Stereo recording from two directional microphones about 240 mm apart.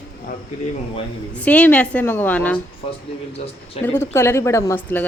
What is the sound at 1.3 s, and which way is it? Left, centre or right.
A woman's voice, centre.